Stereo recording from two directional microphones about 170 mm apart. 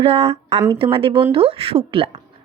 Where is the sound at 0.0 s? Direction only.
35° right (ahead or behind).